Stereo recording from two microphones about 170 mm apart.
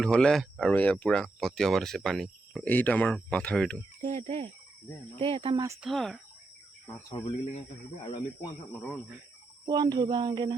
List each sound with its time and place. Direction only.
0.0 s speech: 5° left (ahead or behind)
4.0 s speech: 40° right (ahead or behind)
5.8 s speech: centre (ahead or behind)
6.8 s speech: 20° left (ahead or behind)
7.3 s speech: 40° left (ahead or behind)
8.0 s speech: 30° left (ahead or behind)
9.6 s speech: 25° right (ahead or behind)